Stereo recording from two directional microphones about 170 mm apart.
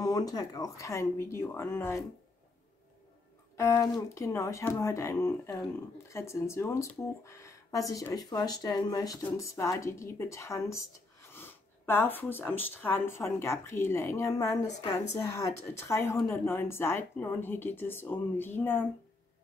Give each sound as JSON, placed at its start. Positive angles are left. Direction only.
{"t": 0.0, "sound": "speech", "side_deg": 20}
{"t": 3.5, "sound": "speech", "side_deg": 15}